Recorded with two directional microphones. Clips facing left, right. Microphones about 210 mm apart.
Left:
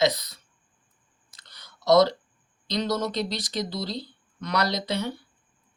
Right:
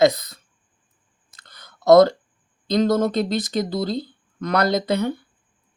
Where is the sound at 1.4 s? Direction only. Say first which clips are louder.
Right 7 dB; 50° right (ahead or behind).